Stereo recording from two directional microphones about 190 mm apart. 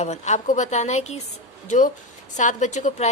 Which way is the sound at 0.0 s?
35° left (ahead or behind).